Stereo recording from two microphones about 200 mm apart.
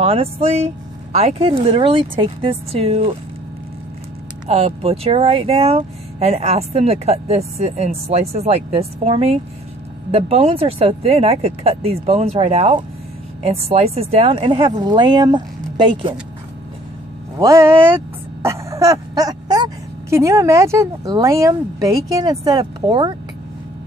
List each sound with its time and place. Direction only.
0.0 s a sound: 30° right (ahead or behind)
1.1 s speech: 30° right (ahead or behind)
4.5 s speech: 30° right (ahead or behind)
17.4 s speech: 15° right (ahead or behind)